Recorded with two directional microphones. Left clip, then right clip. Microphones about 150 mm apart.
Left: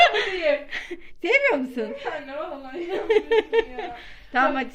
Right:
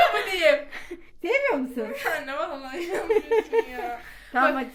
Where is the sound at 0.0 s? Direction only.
Centre (ahead or behind).